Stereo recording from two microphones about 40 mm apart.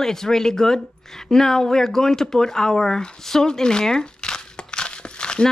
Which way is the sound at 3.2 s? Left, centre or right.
Centre.